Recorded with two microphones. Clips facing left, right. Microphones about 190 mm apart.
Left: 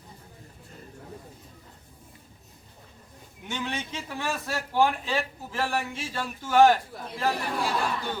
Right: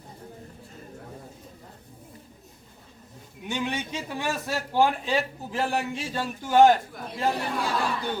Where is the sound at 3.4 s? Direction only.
15° right (ahead or behind).